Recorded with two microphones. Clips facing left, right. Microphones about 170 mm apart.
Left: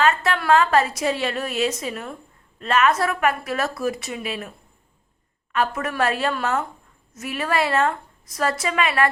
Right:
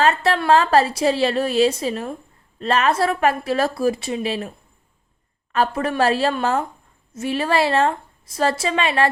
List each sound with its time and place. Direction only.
0.0 s a woman's voice: 35° right (ahead or behind)